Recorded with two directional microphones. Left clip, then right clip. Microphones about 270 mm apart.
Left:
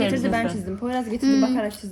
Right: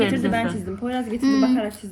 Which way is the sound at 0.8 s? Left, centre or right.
Left.